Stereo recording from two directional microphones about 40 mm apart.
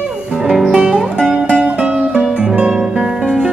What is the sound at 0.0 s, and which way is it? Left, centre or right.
Music, centre.